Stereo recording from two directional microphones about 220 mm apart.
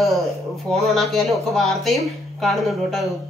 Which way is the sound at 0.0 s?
Centre (ahead or behind).